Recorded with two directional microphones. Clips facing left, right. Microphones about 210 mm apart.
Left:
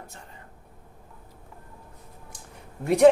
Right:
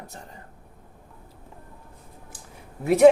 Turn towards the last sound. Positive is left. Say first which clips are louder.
# right 2 dB
turn(degrees=-5)  # may be behind; listen again after turning